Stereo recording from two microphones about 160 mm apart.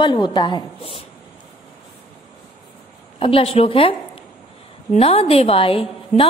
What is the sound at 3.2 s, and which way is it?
A woman's voice, 35° left (ahead or behind).